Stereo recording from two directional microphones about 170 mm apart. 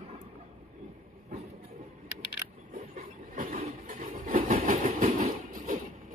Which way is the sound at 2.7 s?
55° right (ahead or behind).